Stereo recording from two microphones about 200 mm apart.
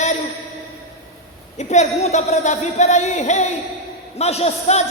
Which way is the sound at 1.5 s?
35° left (ahead or behind).